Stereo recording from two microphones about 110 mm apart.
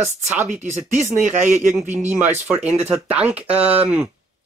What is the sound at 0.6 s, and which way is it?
Speech, 90° right.